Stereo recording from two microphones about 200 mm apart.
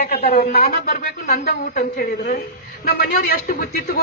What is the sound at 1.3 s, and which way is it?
Speech, 55° left (ahead or behind).